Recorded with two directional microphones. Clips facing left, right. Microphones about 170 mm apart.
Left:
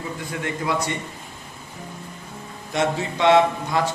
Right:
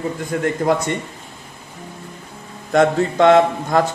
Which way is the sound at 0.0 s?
45° right (ahead or behind).